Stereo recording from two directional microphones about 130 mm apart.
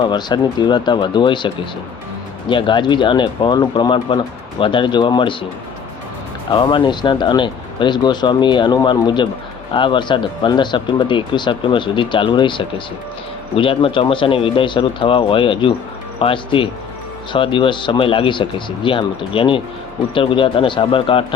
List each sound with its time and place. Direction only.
0.0 s speech: 35° left (ahead or behind)
6.5 s speech: 40° left (ahead or behind)